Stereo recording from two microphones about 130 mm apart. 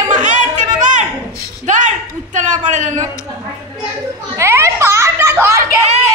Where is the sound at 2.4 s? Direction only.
70° right (ahead or behind).